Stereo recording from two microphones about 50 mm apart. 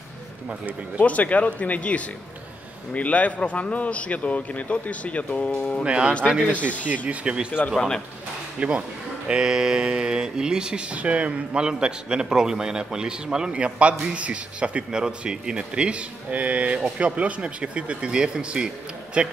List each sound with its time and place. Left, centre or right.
1.0 s a man's voice: left
5.9 s speech: right
6.5 s a man's voice: left
7.1 s speech: centre
8.5 s speech: right